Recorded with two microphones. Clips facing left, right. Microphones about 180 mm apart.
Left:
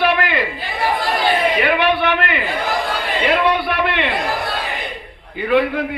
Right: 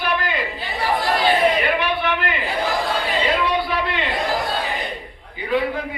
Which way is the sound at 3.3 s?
65° left (ahead or behind).